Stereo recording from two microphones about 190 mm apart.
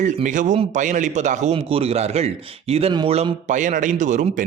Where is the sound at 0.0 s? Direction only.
40° right (ahead or behind).